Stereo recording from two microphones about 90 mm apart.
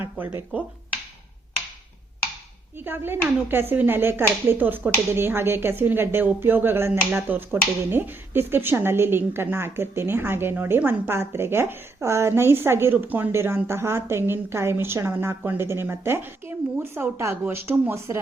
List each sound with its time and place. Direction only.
0.0 s speech: 25° right (ahead or behind)
2.7 s speech: 25° right (ahead or behind)